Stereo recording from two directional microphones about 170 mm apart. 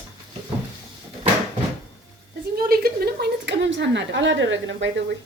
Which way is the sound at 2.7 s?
65° right (ahead or behind).